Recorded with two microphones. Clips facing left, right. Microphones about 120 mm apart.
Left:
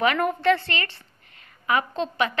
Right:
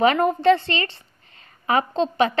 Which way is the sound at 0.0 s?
25° right (ahead or behind).